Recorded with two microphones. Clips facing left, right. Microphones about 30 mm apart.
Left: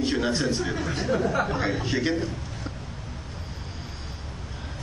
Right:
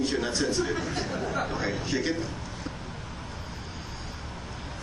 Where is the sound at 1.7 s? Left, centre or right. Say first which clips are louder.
Left 3 dB; left.